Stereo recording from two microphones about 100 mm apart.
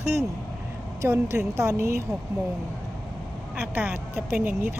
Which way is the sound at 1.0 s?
25° right (ahead or behind).